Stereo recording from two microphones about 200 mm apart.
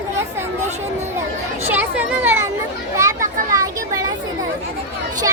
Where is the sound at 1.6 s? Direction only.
10° right (ahead or behind).